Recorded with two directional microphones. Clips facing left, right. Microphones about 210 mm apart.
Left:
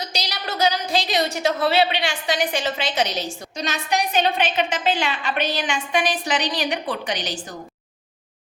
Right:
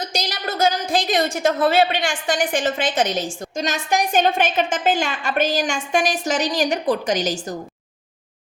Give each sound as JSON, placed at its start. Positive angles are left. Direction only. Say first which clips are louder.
{"t": 0.0, "sound": "a woman's voice", "louder": "right 4 dB", "side_deg": -50}